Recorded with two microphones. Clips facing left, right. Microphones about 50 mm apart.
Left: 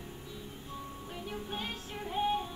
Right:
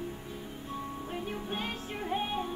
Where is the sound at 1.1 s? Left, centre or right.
Right.